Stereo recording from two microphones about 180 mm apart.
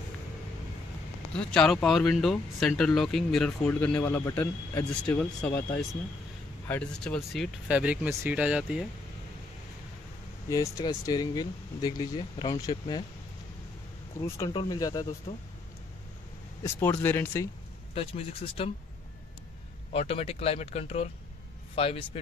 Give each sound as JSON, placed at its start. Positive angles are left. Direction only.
{"t": 1.5, "sound": "speech", "side_deg": 5}
{"t": 7.6, "sound": "speech", "side_deg": -5}
{"t": 10.5, "sound": "speech", "side_deg": 20}
{"t": 14.2, "sound": "speech", "side_deg": 15}
{"t": 17.0, "sound": "speech", "side_deg": 10}
{"t": 17.9, "sound": "speech", "side_deg": 30}
{"t": 19.9, "sound": "speech", "side_deg": 35}